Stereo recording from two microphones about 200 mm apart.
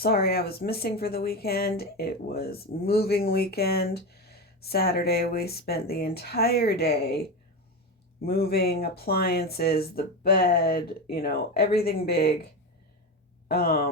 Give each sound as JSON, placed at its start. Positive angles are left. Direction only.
{"t": 0.0, "sound": "speech", "side_deg": 50}
{"t": 8.2, "sound": "speech", "side_deg": 50}
{"t": 13.5, "sound": "speech", "side_deg": 50}